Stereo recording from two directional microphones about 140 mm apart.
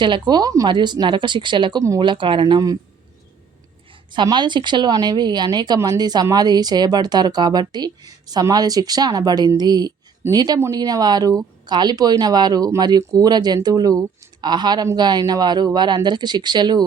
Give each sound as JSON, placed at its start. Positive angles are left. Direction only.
{"t": 0.0, "sound": "speech", "side_deg": -30}
{"t": 4.1, "sound": "speech", "side_deg": -35}